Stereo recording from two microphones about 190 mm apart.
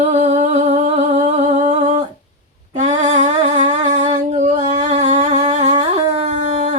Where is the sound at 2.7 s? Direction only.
40° right (ahead or behind).